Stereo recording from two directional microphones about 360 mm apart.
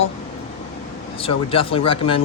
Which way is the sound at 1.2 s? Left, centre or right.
Centre.